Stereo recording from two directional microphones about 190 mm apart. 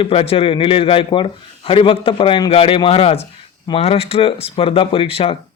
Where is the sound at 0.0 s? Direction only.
30° left (ahead or behind).